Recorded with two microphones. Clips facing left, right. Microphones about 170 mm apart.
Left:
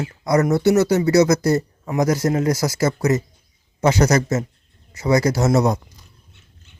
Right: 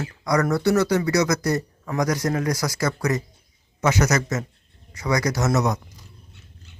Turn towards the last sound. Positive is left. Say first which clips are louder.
# left 5 dB
turn(degrees=30)  # may be behind; listen again after turning